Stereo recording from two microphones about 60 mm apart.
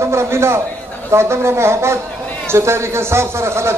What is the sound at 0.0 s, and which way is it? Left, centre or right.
A man's voice, right.